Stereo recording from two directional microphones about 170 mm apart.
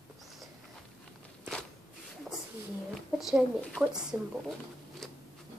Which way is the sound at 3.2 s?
Centre (ahead or behind).